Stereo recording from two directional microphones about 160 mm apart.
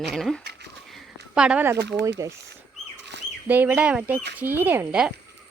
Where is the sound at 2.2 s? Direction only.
20° right (ahead or behind).